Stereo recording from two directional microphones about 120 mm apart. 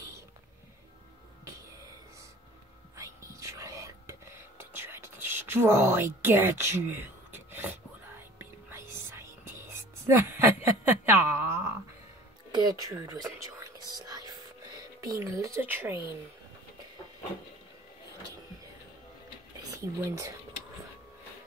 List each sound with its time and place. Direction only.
3.0 s whispering: 25° right (ahead or behind)
7.5 s a sound: 15° right (ahead or behind)
8.4 s whispering: 20° right (ahead or behind)
12.5 s whispering: 30° right (ahead or behind)
15.0 s speech: 25° right (ahead or behind)
19.7 s speech: 25° right (ahead or behind)